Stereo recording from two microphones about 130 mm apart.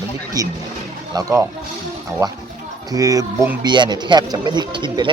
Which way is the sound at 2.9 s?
25° right (ahead or behind).